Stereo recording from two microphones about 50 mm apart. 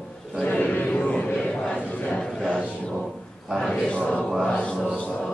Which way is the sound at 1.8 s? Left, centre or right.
Left.